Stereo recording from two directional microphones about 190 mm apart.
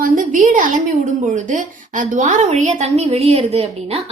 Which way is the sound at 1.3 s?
40° right (ahead or behind).